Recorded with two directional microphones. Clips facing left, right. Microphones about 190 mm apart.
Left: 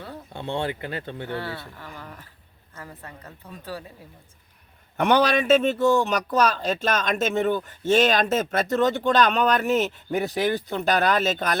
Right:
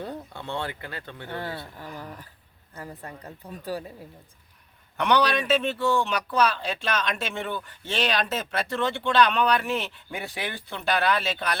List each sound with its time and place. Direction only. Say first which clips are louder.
0.3 s speech: left 8 dB; 20° left (ahead or behind)
1.3 s speech: right 1 dB; 15° right (ahead or behind)
3.2 s speech: right 3 dB; 15° right (ahead or behind)
4.9 s speech: left 3 dB; 45° left (ahead or behind)